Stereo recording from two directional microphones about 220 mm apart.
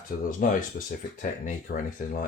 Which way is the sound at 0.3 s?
40° left (ahead or behind).